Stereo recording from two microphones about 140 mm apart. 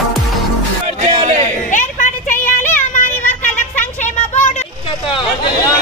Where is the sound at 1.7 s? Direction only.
70° left (ahead or behind).